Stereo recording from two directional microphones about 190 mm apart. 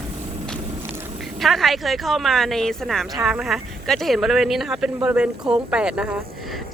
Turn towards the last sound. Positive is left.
turn(degrees=-5)  # may be behind; listen again after turning